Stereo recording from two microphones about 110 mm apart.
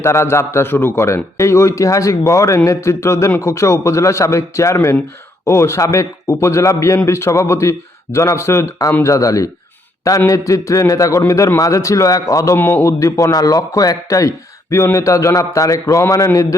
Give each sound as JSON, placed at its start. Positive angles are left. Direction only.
{"t": 0.0, "sound": "a man's voice", "side_deg": 25}
{"t": 12.5, "sound": "a man's voice", "side_deg": 20}